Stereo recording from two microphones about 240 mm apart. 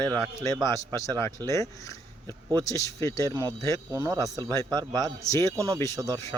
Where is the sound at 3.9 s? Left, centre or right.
Centre.